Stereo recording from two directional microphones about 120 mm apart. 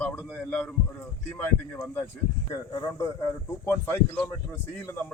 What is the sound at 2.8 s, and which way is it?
Speech, 30° left (ahead or behind).